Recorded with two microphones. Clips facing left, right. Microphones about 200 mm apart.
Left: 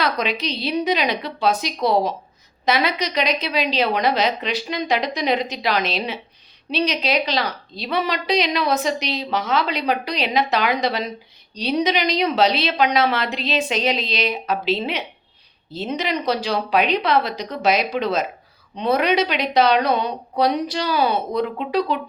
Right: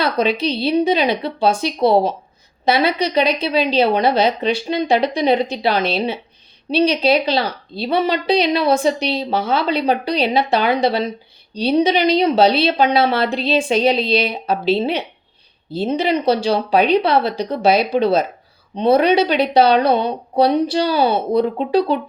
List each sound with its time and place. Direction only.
0.0 s a woman's voice: 30° right (ahead or behind)